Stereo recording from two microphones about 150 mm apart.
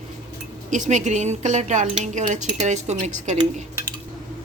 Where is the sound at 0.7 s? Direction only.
55° right (ahead or behind).